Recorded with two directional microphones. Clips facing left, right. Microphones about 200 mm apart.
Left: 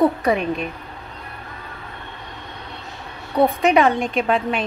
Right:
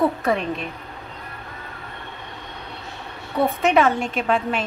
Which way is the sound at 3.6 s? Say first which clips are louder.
Left 2 dB; centre (ahead or behind).